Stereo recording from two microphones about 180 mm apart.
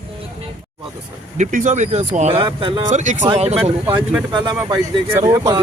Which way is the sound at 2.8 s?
40° right (ahead or behind).